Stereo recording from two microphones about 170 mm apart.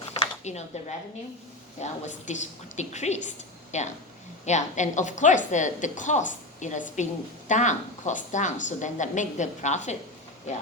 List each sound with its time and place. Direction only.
0.4 s a woman's voice: 40° left (ahead or behind)